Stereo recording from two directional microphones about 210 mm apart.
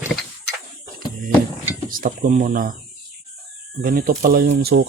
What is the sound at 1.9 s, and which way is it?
Speech, 40° right (ahead or behind).